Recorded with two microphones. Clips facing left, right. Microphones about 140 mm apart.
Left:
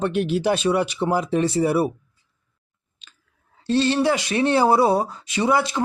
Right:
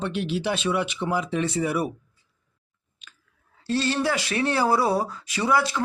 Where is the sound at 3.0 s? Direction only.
25° left (ahead or behind).